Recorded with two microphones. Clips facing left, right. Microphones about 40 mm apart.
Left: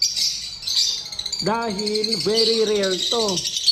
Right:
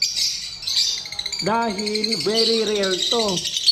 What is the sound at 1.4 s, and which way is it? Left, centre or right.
Speech, right.